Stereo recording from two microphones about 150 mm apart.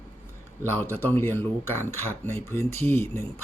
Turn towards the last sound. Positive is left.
turn(degrees=15)  # may be behind; listen again after turning